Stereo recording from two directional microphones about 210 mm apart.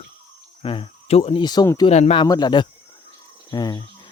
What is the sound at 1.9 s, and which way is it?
Speech, 30° left (ahead or behind).